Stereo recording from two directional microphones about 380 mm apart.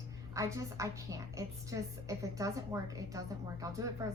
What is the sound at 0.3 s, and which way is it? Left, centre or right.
A woman's voice, centre.